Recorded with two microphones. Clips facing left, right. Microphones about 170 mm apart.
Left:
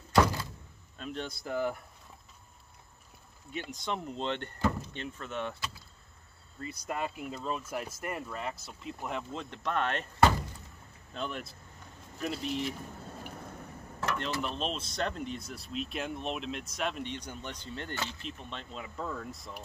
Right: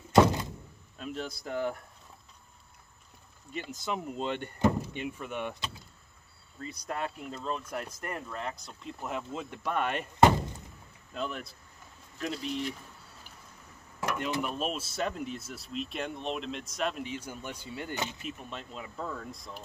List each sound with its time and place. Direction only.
0.1 s door: 20° right (ahead or behind)
0.9 s speech: 5° right (ahead or behind)
3.5 s speech: centre (ahead or behind)
6.6 s speech: 5° left (ahead or behind)
12.9 s a sound: 50° left (ahead or behind)
14.0 s speech: 10° right (ahead or behind)